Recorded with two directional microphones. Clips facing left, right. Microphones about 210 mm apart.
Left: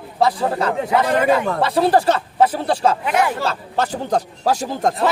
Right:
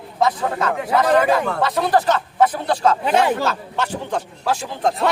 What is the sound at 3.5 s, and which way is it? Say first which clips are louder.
Speech: left 2 dB; 35° left (ahead or behind).